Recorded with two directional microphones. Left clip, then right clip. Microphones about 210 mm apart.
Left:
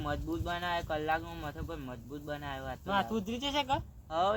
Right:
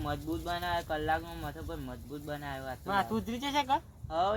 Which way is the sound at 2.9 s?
10° left (ahead or behind).